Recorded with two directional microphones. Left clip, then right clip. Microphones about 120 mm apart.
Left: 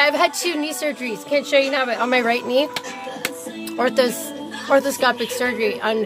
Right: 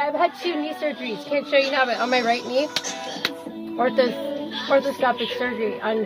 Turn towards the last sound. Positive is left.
turn(degrees=40)  # may be behind; listen again after turning